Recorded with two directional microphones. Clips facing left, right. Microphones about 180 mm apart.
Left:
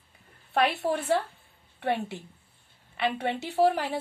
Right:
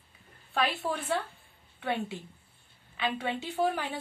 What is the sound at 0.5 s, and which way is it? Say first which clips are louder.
A woman's voice: left 5 dB; 70° left (ahead or behind).